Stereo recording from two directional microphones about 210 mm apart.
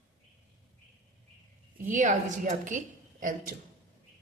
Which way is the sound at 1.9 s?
35° right (ahead or behind).